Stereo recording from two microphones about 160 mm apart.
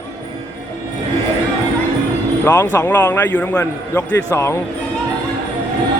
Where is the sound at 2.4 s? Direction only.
20° left (ahead or behind).